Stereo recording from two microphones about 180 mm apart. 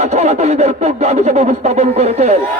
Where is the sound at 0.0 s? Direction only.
35° right (ahead or behind).